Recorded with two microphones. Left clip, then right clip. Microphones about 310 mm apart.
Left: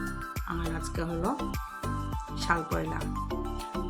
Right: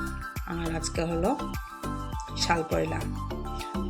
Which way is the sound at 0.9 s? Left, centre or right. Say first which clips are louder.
Right 5 dB; centre.